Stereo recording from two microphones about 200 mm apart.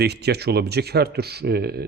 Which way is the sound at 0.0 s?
55° right (ahead or behind).